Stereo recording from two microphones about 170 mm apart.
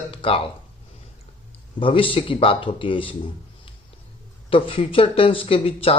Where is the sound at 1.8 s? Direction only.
30° left (ahead or behind).